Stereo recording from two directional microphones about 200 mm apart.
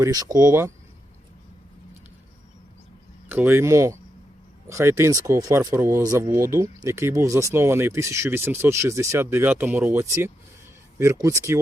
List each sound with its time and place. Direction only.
0.0 s speech: 20° right (ahead or behind)
3.2 s speech: 10° right (ahead or behind)